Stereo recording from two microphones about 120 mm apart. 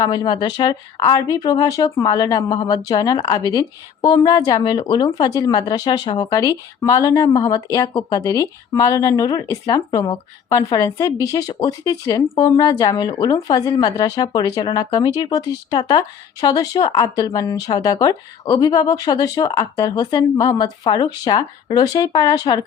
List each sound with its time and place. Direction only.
0.0 s speech: 35° left (ahead or behind)